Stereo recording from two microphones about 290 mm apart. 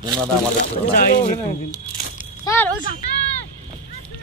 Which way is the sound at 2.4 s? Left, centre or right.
Centre.